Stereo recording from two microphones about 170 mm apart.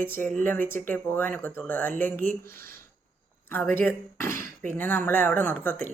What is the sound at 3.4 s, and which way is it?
Speech, 10° left (ahead or behind).